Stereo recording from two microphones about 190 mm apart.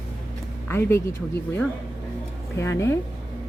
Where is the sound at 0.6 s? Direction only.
10° left (ahead or behind).